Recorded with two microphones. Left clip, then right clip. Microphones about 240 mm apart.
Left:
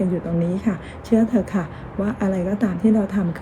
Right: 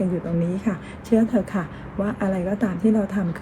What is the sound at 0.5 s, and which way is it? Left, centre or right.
A woman's voice, centre.